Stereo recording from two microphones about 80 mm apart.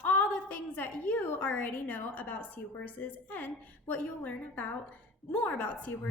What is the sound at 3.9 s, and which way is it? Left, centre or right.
A woman's voice, centre.